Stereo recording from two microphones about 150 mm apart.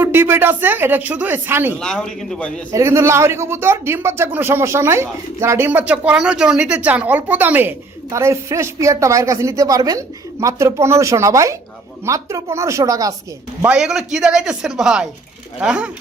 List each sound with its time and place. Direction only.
0.0 s speech: 15° right (ahead or behind)
1.8 s speech: 5° left (ahead or behind)
2.7 s speech: 20° right (ahead or behind)
13.6 s speech: 5° right (ahead or behind)